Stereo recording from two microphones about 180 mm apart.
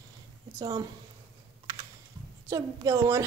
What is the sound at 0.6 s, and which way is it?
Speech, 20° right (ahead or behind).